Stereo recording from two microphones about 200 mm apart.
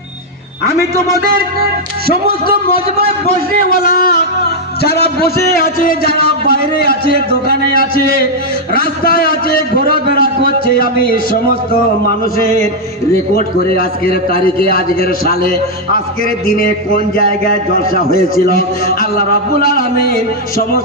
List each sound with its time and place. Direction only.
2.0 s speech: 50° right (ahead or behind)
3.5 s a man's voice: 45° left (ahead or behind)
13.7 s a man's voice: 45° left (ahead or behind)